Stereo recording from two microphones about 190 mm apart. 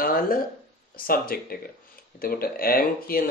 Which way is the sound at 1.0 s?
50° left (ahead or behind).